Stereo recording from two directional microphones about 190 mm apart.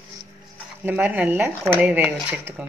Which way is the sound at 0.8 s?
10° right (ahead or behind).